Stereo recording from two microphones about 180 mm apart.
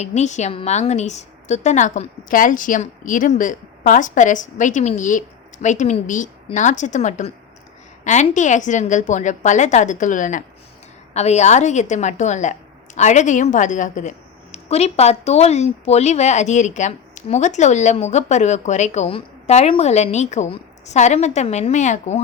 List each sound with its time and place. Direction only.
0.0 s a woman's voice: 40° left (ahead or behind)